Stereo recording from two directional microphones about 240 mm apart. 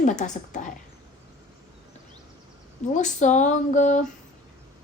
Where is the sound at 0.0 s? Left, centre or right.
Left.